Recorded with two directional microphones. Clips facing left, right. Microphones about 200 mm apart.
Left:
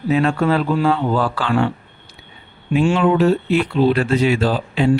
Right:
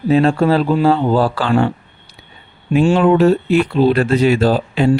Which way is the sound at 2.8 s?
40° right (ahead or behind).